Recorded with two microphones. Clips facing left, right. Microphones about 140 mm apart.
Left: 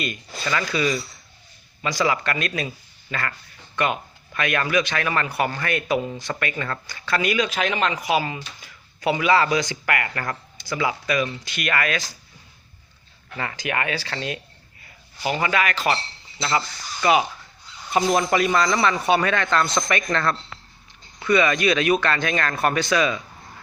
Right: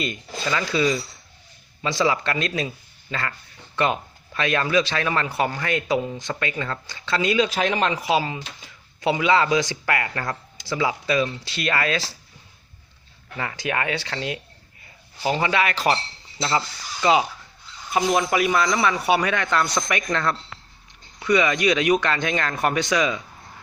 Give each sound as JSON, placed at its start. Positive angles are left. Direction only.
{"t": 0.0, "sound": "speech", "side_deg": -20}
{"t": 4.4, "sound": "speech", "side_deg": -25}
{"t": 13.3, "sound": "speech", "side_deg": -20}
{"t": 16.6, "sound": "speech", "side_deg": -20}
{"t": 17.9, "sound": "a man's voice", "side_deg": -5}